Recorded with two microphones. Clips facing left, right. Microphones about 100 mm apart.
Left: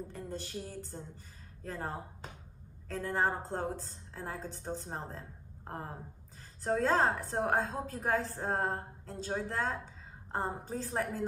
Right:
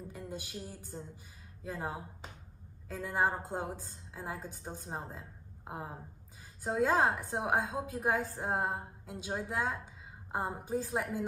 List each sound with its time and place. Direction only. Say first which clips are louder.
0.1 s a woman's voice: left 2 dB; 10° right (ahead or behind)